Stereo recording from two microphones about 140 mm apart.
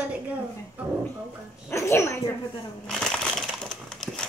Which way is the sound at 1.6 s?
20° left (ahead or behind).